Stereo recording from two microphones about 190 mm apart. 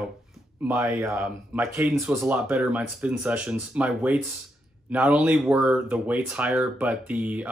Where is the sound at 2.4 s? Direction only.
Centre (ahead or behind).